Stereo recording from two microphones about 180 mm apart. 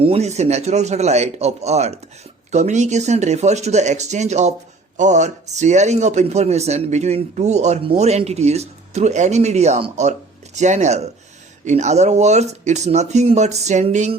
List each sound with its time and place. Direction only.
0.0 s speech: 35° right (ahead or behind)